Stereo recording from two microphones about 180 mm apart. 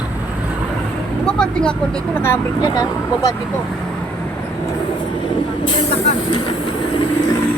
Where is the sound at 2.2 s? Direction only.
15° left (ahead or behind).